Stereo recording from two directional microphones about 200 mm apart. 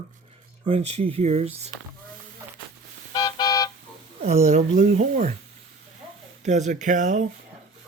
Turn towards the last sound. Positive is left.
turn(degrees=-35)  # may be behind; listen again after turning